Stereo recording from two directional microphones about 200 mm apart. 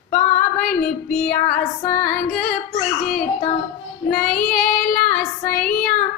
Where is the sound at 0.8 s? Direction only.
45° left (ahead or behind).